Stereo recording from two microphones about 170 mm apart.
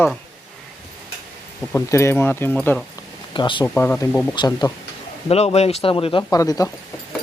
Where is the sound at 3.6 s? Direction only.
10° left (ahead or behind).